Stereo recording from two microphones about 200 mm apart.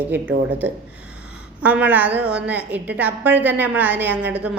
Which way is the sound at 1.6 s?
5° right (ahead or behind).